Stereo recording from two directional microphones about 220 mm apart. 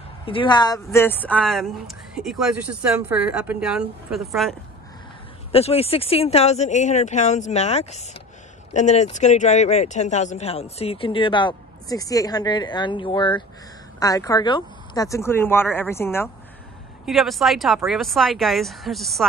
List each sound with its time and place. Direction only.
0.2 s speech: 25° left (ahead or behind); by 4.6 s centre (ahead or behind)
5.5 s speech: 25° left (ahead or behind); by 16.3 s 10° left (ahead or behind)
17.0 s speech: centre (ahead or behind)